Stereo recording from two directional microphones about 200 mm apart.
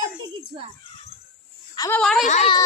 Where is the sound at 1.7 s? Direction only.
15° left (ahead or behind).